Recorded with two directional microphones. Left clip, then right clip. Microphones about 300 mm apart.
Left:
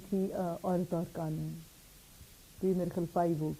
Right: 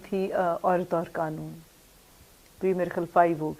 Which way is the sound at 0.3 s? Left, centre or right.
Centre.